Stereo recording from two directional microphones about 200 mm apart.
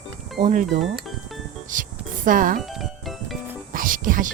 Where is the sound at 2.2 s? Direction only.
40° right (ahead or behind).